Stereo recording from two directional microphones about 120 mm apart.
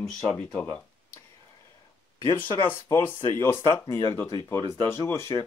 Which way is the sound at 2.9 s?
20° left (ahead or behind).